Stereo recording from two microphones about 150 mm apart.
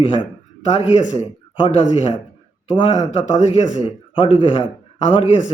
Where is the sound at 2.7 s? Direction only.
35° left (ahead or behind).